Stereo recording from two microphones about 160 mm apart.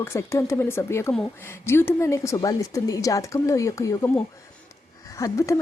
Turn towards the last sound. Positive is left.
turn(degrees=20)  # may be behind; listen again after turning